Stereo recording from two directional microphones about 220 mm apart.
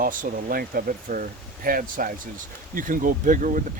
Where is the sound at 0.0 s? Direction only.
40° right (ahead or behind).